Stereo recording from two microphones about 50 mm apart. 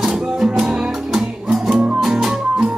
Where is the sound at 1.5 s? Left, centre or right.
Centre.